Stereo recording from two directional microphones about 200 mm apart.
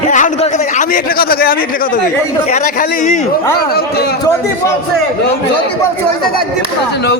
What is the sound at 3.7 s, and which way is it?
Speech, 50° left (ahead or behind).